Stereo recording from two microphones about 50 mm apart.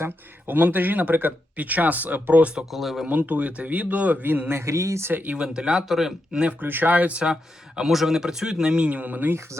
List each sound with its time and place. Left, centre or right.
0.4 s speech: right
2.7 s speech: centre
3.1 s speech: right
4.6 s speech: right
5.1 s speech: right
5.4 s speech: centre
6.6 s speech: right
7.9 s speech: centre; by 9.3 s right